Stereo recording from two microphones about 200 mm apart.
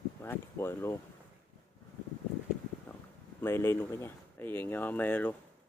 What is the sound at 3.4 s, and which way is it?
Speech, 10° left (ahead or behind).